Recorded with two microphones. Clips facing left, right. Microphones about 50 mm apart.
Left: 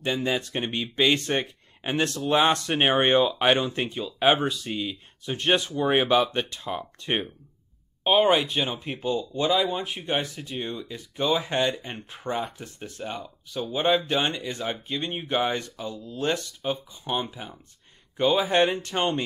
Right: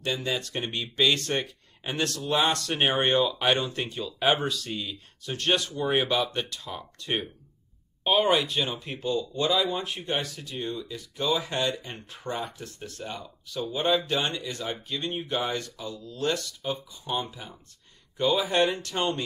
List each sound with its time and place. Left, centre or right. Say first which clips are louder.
0.0 s speech: left 3 dB; left
8.0 s speech: left 3 dB; centre